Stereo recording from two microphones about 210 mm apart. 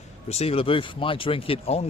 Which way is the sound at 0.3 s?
30° left (ahead or behind).